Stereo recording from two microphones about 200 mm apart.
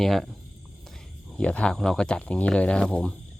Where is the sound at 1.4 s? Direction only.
5° left (ahead or behind).